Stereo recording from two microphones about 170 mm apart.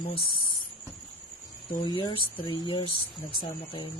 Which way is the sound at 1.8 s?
30° left (ahead or behind).